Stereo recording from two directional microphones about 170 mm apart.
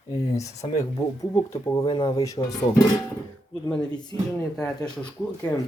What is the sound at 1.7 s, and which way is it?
Speech, 25° left (ahead or behind).